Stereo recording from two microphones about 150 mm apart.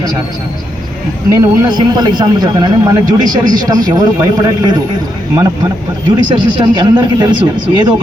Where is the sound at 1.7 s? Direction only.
30° right (ahead or behind).